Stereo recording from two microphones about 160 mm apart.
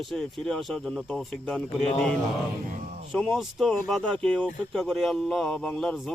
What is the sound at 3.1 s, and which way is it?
Speech, centre (ahead or behind).